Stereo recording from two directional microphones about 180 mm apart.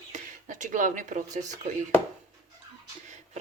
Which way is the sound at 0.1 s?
45° right (ahead or behind).